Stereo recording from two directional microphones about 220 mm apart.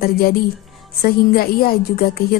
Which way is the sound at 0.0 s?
45° left (ahead or behind).